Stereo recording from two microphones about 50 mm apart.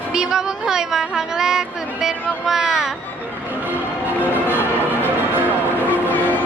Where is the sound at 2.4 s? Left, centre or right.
Centre.